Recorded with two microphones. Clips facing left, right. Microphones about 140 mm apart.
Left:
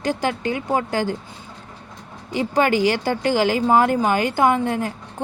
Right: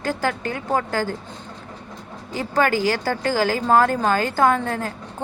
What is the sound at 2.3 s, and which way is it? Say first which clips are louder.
Speech: left 2 dB; 20° left (ahead or behind).